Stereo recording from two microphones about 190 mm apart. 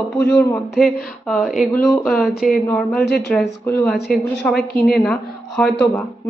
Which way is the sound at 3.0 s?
60° left (ahead or behind).